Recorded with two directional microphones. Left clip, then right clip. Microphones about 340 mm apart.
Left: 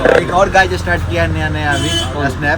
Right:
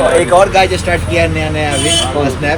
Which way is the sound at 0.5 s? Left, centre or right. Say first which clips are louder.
Right 1 dB; centre.